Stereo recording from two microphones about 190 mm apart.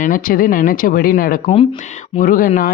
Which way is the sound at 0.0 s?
45° left (ahead or behind).